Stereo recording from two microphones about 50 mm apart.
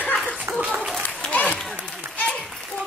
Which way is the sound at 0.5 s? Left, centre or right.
Right.